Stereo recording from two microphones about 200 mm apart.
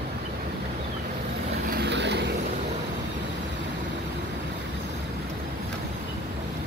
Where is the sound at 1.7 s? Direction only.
55° right (ahead or behind).